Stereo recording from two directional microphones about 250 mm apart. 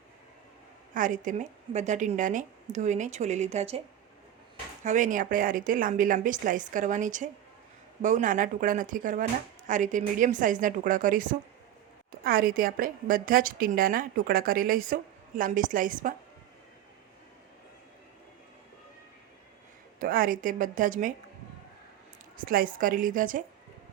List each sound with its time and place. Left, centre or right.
0.9 s a woman's voice: right
4.8 s a woman's voice: right
20.0 s a woman's voice: right
22.4 s a woman's voice: right